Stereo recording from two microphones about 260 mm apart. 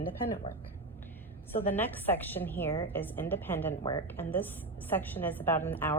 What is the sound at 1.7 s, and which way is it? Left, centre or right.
A woman's voice, centre.